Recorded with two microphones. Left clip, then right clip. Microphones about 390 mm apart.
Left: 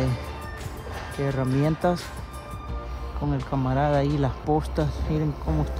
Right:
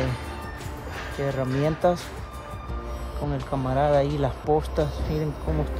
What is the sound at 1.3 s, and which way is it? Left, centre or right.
Speech, centre.